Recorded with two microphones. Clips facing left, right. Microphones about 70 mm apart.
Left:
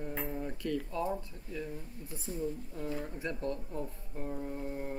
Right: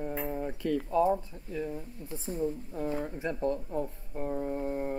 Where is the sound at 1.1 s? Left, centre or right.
Right.